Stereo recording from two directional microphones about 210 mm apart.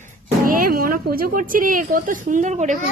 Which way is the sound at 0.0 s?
45° right (ahead or behind).